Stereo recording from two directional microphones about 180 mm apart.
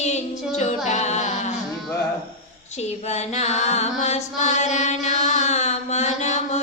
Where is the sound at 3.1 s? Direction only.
40° left (ahead or behind).